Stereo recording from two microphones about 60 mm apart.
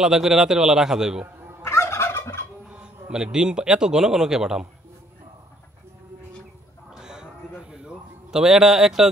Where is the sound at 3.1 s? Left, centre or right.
Centre.